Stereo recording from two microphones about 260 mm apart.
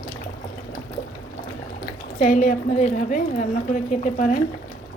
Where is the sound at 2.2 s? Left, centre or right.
Left.